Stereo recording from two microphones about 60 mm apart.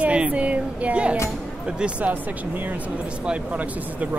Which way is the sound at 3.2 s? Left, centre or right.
Right.